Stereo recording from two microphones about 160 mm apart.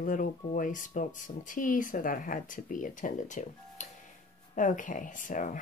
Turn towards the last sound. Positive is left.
turn(degrees=55)  # may be behind; listen again after turning